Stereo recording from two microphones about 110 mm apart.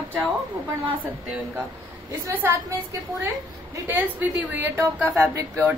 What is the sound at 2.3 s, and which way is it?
Speech, 20° right (ahead or behind).